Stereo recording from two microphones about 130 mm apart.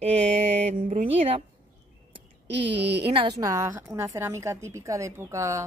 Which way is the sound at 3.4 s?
25° right (ahead or behind).